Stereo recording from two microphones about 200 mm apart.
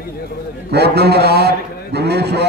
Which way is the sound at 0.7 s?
55° right (ahead or behind).